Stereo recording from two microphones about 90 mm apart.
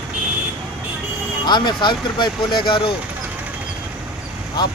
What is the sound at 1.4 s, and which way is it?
Speech, 55° left (ahead or behind).